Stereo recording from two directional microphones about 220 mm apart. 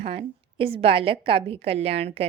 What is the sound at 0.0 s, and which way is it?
A woman's voice, 25° right (ahead or behind).